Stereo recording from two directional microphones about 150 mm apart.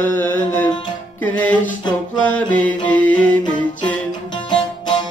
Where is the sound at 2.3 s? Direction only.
10° left (ahead or behind).